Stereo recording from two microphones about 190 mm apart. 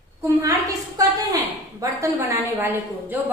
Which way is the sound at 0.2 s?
15° right (ahead or behind).